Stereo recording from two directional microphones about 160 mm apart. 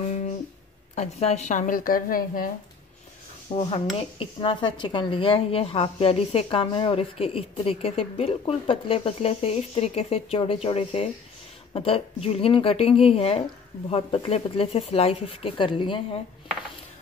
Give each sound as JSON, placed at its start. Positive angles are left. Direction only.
{"t": 0.9, "sound": "a woman's voice", "side_deg": 45}
{"t": 3.5, "sound": "speech", "side_deg": 35}